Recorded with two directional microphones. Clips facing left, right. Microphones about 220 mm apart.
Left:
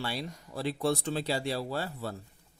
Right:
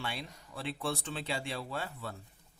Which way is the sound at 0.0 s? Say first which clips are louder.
Left 5 dB; 35° left (ahead or behind).